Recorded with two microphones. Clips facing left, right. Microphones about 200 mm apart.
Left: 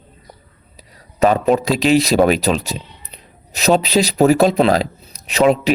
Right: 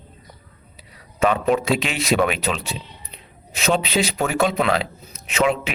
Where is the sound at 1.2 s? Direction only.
40° left (ahead or behind).